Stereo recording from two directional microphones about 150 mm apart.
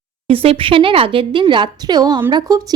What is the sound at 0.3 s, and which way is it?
A woman's voice, 40° right (ahead or behind).